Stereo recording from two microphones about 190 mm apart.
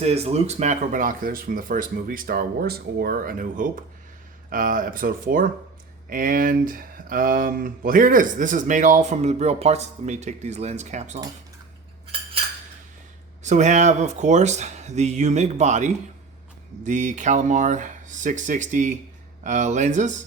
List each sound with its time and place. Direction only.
0.0 s speech: 35° right (ahead or behind)
13.4 s speech: 40° right (ahead or behind)